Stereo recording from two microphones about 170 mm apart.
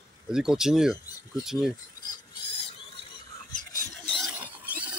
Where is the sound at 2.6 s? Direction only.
30° left (ahead or behind).